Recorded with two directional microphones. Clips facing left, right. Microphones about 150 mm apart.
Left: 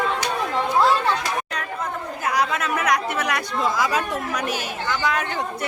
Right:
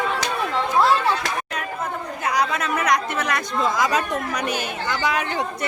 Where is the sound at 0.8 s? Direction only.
Centre (ahead or behind).